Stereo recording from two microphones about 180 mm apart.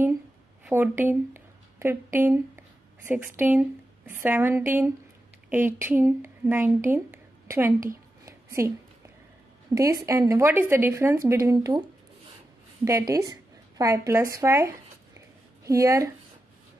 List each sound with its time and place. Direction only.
0.7 s speech: 10° right (ahead or behind)
8.3 s a sound: 15° right (ahead or behind)
9.8 s speech: 15° right (ahead or behind)
12.8 s speech: 15° right (ahead or behind)